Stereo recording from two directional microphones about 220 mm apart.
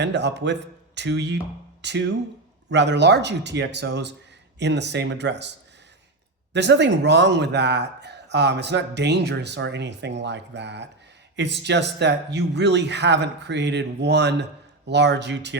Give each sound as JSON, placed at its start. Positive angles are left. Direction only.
{"t": 0.0, "sound": "a man's voice", "side_deg": -50}